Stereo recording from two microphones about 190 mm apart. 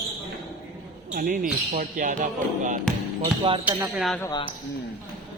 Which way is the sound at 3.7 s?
10° right (ahead or behind).